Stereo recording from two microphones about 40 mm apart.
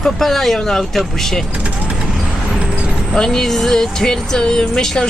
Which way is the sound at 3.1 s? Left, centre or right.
Centre.